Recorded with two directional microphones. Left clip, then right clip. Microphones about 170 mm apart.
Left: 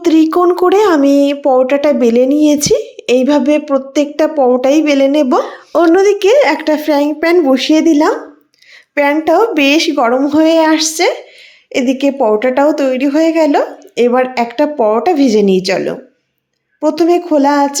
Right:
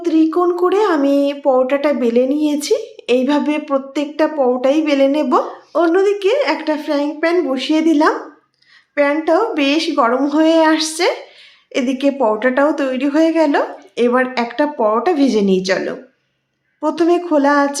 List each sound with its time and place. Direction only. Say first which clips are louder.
0.0 s speech: left 5 dB; 55° left (ahead or behind); by 5.4 s 30° left (ahead or behind)
5.5 s speech: left 5 dB; 45° left (ahead or behind)
9.0 s a woman's voice: left 4 dB; 40° left (ahead or behind); by 17.7 s 20° left (ahead or behind)